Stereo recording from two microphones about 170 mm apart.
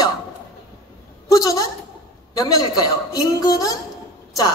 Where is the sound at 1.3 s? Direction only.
20° left (ahead or behind).